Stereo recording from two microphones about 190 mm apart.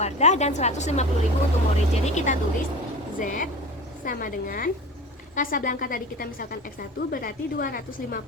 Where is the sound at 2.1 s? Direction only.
35° left (ahead or behind).